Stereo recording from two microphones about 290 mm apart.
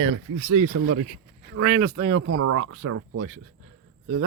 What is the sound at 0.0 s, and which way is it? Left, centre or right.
Speech, right.